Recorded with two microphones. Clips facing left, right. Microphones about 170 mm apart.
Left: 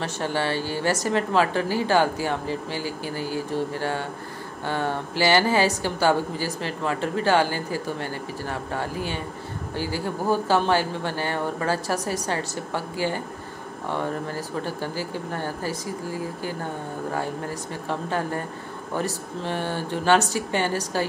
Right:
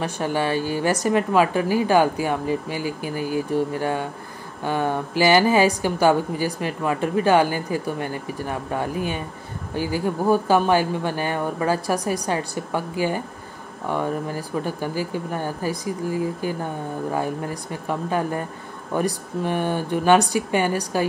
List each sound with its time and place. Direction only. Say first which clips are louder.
0.0 s a woman's voice: right 3 dB; 15° right (ahead or behind)